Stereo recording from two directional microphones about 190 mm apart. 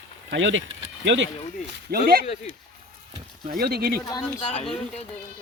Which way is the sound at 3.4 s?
55° right (ahead or behind).